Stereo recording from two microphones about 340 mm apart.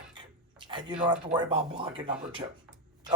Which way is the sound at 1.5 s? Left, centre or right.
Centre.